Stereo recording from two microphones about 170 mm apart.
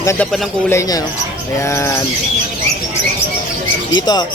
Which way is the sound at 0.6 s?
20° left (ahead or behind).